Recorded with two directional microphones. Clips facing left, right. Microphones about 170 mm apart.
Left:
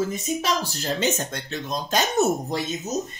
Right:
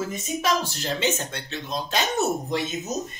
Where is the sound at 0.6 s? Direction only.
45° left (ahead or behind).